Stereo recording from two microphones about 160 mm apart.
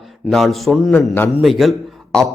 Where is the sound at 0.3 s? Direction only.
Centre (ahead or behind).